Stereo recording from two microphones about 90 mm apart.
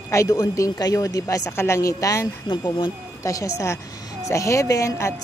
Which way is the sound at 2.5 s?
60° left (ahead or behind).